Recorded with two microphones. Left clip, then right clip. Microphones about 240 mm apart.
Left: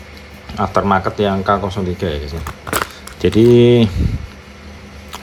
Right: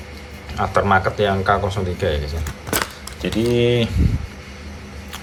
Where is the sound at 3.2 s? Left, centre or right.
Left.